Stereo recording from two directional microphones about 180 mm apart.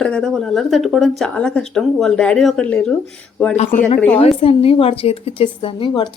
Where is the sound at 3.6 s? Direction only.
45° left (ahead or behind).